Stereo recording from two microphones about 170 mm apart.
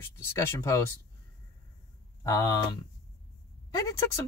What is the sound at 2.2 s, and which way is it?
Speech, 20° left (ahead or behind).